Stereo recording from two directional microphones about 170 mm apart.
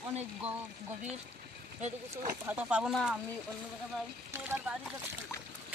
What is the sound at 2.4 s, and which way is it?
Speech, 10° right (ahead or behind).